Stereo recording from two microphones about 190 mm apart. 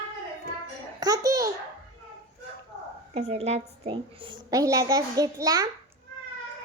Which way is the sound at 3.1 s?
35° right (ahead or behind).